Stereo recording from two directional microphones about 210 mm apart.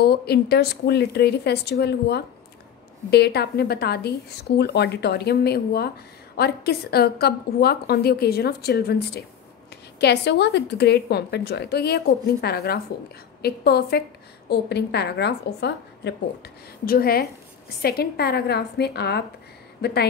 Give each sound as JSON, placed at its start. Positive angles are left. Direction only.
{"t": 0.0, "sound": "a woman's voice", "side_deg": 50}